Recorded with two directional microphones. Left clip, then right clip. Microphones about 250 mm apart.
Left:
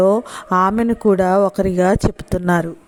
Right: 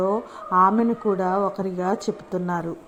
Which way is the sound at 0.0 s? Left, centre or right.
Left.